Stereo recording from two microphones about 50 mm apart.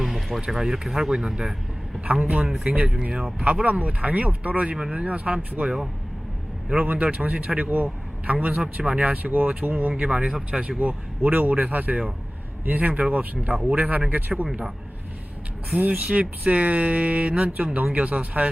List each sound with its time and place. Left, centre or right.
0.0 s music: centre
0.4 s speech: centre
2.0 s speech: right
3.5 s speech: right
6.8 s speech: right
15.7 s speech: right